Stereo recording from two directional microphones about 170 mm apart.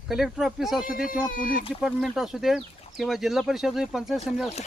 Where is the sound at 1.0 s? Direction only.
50° left (ahead or behind).